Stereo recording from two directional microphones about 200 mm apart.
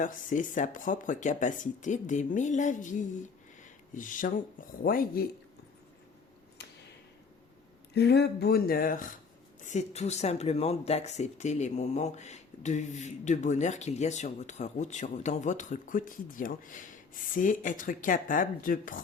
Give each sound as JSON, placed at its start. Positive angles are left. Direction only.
{"t": 0.0, "sound": "speech", "side_deg": 40}
{"t": 6.6, "sound": "a sound", "side_deg": 55}
{"t": 7.9, "sound": "speech", "side_deg": 55}